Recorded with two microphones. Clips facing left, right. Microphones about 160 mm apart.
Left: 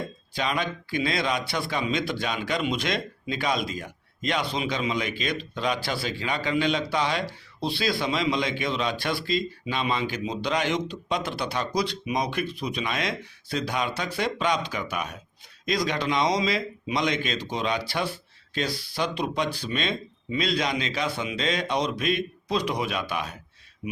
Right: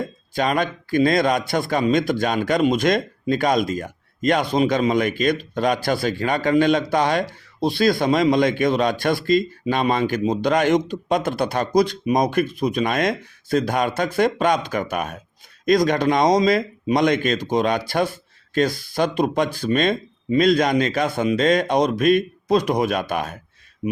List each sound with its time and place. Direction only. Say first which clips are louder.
0.3 s a man's voice: right 7 dB; 50° right (ahead or behind)